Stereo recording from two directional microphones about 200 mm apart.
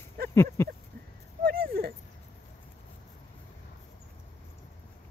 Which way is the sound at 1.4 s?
50° right (ahead or behind).